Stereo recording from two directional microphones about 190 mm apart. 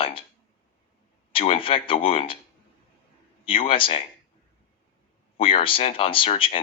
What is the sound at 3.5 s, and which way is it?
Speech, 30° left (ahead or behind).